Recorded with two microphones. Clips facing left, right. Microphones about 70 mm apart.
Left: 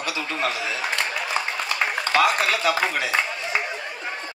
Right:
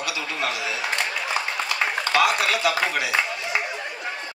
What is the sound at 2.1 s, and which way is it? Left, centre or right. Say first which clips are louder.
A man's voice: left 1 dB; left.